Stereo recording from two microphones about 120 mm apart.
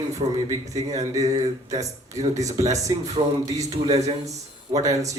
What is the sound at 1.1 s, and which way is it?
Speech, 30° right (ahead or behind).